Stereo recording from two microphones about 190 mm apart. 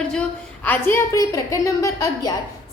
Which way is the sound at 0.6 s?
10° left (ahead or behind).